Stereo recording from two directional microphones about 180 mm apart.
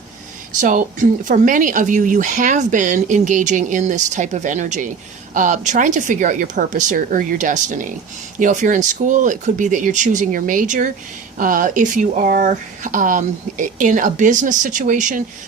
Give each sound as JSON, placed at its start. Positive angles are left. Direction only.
{"t": 0.6, "sound": "speech", "side_deg": -45}